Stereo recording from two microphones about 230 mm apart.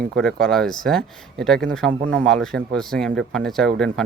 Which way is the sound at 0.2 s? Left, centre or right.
Centre.